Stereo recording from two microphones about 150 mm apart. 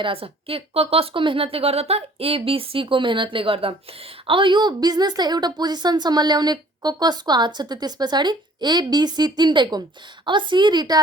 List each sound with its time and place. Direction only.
0.0 s a woman's voice: 40° right (ahead or behind)